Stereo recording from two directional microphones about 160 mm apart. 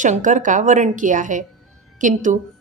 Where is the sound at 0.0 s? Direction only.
50° right (ahead or behind).